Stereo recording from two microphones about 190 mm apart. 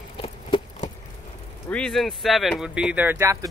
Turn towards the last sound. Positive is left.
turn(degrees=-10)  # may be behind; listen again after turning